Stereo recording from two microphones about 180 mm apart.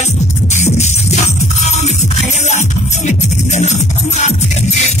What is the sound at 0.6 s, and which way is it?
Music, 40° left (ahead or behind).